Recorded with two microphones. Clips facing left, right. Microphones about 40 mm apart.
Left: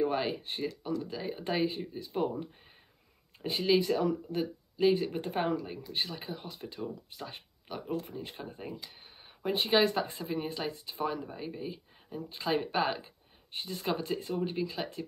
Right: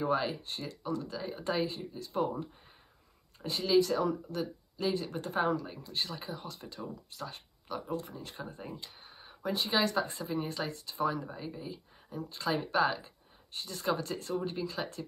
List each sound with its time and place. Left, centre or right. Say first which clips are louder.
0.0 s speech: left 1 dB; left
3.4 s speech: even; left
9.4 s speech: left 4 dB; left
10.3 s speech: left 1 dB; centre